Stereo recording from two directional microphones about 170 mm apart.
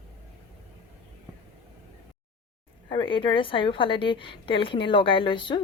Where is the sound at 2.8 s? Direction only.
30° left (ahead or behind).